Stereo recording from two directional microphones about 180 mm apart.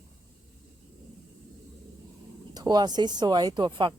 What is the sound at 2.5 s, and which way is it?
Speech, 25° right (ahead or behind).